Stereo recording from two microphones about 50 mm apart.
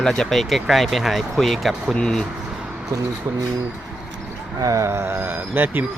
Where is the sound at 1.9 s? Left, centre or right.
Centre.